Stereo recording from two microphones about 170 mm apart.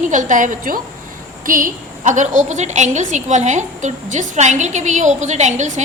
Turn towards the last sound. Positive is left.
turn(degrees=-45)  # may be behind; listen again after turning